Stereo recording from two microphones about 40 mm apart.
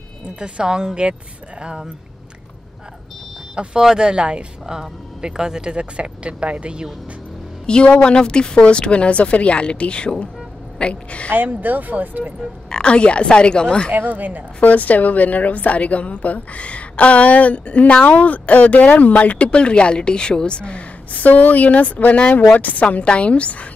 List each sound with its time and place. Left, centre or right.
0.4 s speech: right
3.8 s speech: centre
7.6 s speech: left
11.3 s speech: right
12.6 s speech: left
13.9 s speech: right
14.6 s a woman's voice: left